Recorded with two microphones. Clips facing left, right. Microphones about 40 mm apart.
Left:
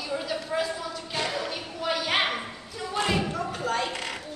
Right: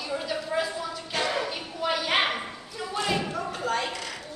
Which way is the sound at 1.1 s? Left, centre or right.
Right.